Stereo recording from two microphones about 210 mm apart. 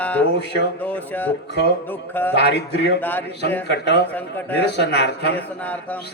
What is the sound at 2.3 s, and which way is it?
Speech, 50° left (ahead or behind).